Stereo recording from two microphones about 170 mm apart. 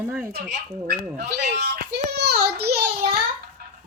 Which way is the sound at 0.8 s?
70° right (ahead or behind).